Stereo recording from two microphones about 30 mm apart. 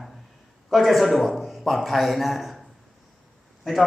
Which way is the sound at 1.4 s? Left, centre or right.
Centre.